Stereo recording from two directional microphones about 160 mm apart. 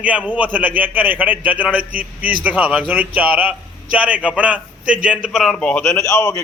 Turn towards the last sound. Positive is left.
turn(degrees=20)  # may be behind; listen again after turning